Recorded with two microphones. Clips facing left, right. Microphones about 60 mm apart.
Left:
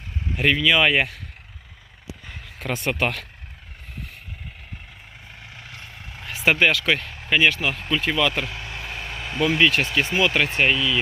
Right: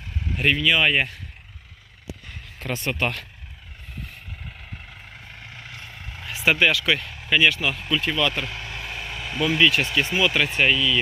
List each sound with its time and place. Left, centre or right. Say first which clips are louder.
0.3 s speech: left 2 dB; left
2.8 s speech: left 2 dB; left
5.4 s vehicle: even; right
6.1 s vehicle: even; left
6.4 s speech: left 1 dB; left
8.0 s speech: left 2 dB; left
8.4 s vehicle: even; left
9.5 s speech: even; left
10.2 s speech: left 1 dB; left
10.5 s speech: even; left